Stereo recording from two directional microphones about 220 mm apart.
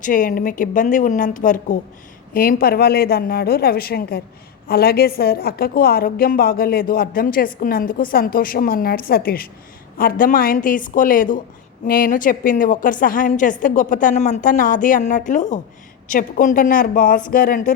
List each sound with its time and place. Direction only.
0.0 s a woman's voice: 40° left (ahead or behind)